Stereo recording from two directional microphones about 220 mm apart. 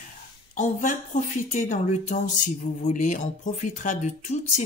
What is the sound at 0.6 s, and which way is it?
Speech, 35° left (ahead or behind).